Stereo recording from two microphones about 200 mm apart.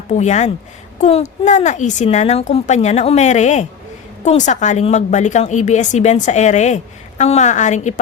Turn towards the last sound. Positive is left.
turn(degrees=35)  # may be behind; listen again after turning